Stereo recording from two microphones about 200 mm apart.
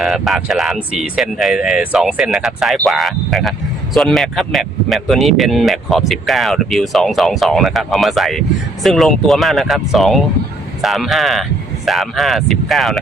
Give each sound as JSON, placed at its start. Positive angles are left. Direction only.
{"t": 0.0, "sound": "speech", "side_deg": 0}